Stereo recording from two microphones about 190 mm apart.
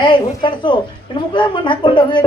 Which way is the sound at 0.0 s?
25° left (ahead or behind).